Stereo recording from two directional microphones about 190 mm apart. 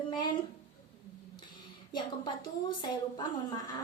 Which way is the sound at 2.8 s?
20° left (ahead or behind).